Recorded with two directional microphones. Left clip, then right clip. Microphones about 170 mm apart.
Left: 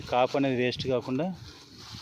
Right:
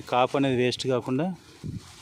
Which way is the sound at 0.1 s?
50° right (ahead or behind).